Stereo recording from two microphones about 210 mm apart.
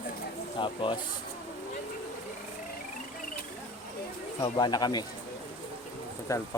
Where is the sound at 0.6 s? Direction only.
25° left (ahead or behind).